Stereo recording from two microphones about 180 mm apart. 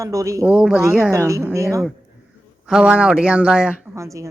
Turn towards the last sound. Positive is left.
turn(degrees=-5)  # may be behind; listen again after turning